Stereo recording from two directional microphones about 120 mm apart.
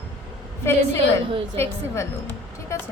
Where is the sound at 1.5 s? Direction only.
20° left (ahead or behind).